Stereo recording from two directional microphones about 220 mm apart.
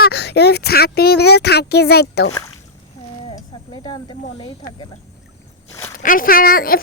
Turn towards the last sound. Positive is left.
turn(degrees=40)  # may be behind; listen again after turning